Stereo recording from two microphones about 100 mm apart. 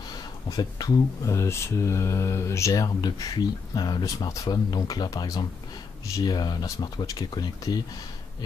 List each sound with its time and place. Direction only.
0.1 s speech: 40° left (ahead or behind)